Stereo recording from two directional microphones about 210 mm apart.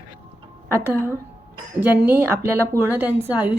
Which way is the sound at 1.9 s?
10° right (ahead or behind).